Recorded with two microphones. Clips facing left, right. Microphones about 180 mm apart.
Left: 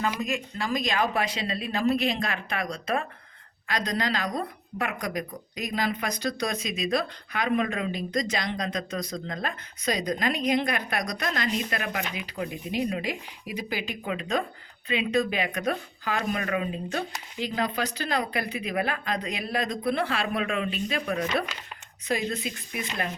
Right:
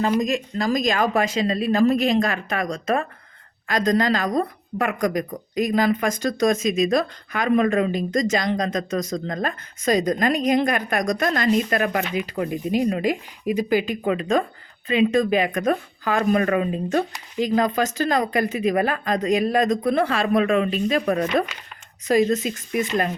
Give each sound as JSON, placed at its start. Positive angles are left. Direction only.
{"t": 0.0, "sound": "a woman's voice", "side_deg": -35}